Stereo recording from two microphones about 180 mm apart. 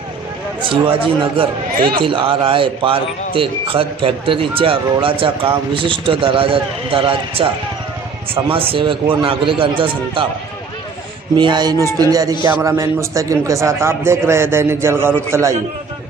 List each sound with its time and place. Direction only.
0.6 s speech: 30° right (ahead or behind)
11.3 s a man's voice: 25° right (ahead or behind)